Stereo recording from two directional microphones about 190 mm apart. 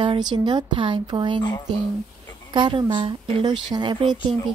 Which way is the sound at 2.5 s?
25° right (ahead or behind).